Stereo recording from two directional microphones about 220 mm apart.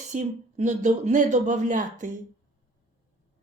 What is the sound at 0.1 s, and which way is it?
A woman's voice, 35° right (ahead or behind).